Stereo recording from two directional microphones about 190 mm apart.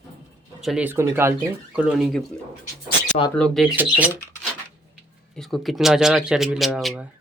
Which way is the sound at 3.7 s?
10° right (ahead or behind).